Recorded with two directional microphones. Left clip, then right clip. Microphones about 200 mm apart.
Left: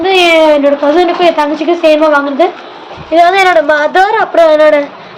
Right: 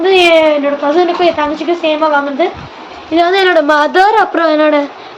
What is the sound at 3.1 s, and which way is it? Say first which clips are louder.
A woman's voice: left 4 dB; centre (ahead or behind).